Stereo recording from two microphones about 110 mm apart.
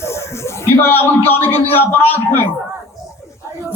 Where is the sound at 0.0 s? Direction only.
25° left (ahead or behind).